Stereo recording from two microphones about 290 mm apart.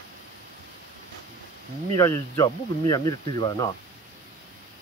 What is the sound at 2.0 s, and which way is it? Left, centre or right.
Speech, centre.